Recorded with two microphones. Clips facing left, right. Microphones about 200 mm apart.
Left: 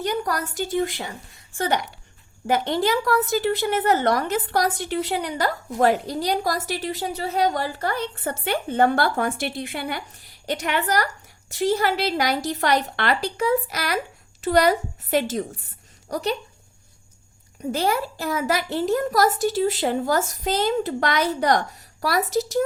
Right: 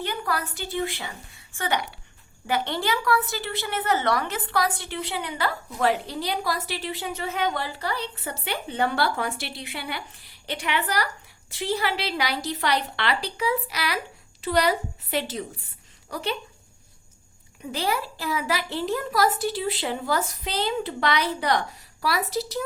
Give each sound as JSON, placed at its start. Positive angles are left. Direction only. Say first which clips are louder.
{"t": 0.0, "sound": "a woman's voice", "louder": "left 4 dB", "side_deg": 45}
{"t": 17.7, "sound": "a woman's voice", "louder": "left 4 dB", "side_deg": 45}